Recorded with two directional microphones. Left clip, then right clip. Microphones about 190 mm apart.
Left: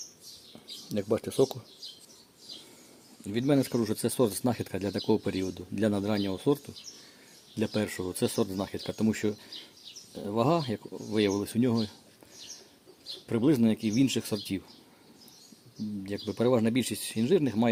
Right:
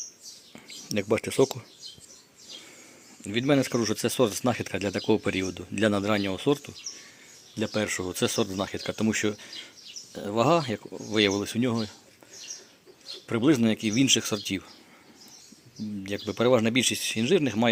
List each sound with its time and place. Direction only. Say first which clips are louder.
0.9 s speech: right 3 dB; 5° right (ahead or behind)
3.2 s speech: right 3 dB; centre (ahead or behind)
13.2 s speech: right 3 dB; centre (ahead or behind)
16.0 s speech: right 4 dB; 5° right (ahead or behind)